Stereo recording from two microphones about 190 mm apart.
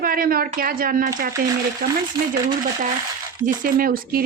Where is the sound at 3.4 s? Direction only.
45° right (ahead or behind).